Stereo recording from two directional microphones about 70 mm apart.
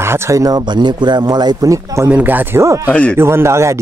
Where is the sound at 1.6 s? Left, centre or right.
Right.